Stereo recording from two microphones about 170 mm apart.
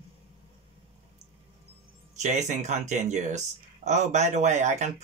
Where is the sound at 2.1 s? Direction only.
45° right (ahead or behind).